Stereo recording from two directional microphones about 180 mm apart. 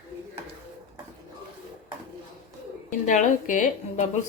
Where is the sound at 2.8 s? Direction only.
45° left (ahead or behind).